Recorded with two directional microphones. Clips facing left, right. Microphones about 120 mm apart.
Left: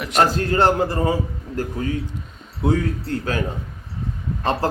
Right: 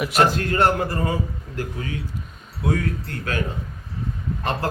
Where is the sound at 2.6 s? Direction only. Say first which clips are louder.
Left 4 dB; 30° left (ahead or behind).